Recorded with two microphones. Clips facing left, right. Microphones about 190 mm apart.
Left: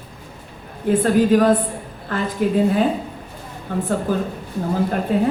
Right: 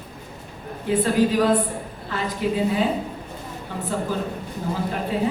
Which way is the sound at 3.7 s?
50° left (ahead or behind).